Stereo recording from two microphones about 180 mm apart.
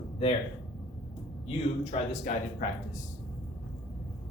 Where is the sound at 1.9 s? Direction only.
40° left (ahead or behind).